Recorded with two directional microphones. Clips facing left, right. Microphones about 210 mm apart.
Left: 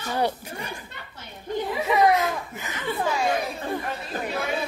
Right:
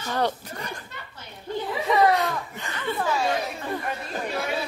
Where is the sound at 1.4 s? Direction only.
15° left (ahead or behind).